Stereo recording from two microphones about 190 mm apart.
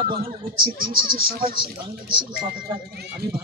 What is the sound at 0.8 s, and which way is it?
Speech, 50° right (ahead or behind).